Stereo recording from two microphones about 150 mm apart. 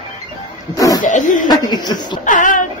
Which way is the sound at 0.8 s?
20° left (ahead or behind).